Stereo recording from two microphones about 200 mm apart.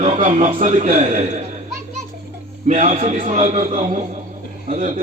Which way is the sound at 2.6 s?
35° right (ahead or behind).